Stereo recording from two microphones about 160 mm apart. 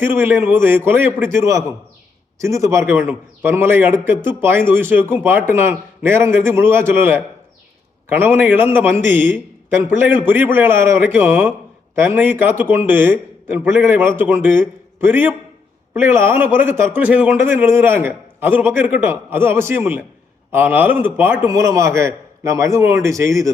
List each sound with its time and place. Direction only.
0.0 s a man's voice: 10° right (ahead or behind)